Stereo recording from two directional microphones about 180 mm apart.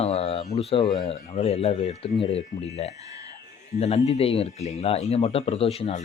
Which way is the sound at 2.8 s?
35° left (ahead or behind).